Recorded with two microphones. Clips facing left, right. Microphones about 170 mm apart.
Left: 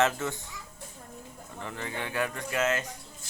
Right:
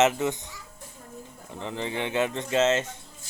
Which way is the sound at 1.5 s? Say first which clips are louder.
Right 6 dB; 20° right (ahead or behind).